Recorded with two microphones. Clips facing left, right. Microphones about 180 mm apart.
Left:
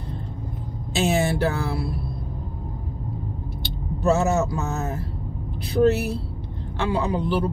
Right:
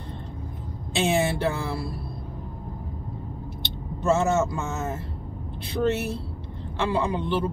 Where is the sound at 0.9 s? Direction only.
Centre (ahead or behind).